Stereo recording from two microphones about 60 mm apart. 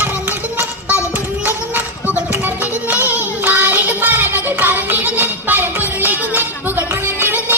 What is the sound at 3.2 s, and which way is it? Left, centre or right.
Music, right.